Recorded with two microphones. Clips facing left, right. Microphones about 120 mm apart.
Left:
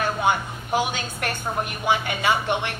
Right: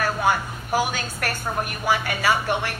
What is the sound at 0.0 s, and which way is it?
A woman's voice, 20° left (ahead or behind).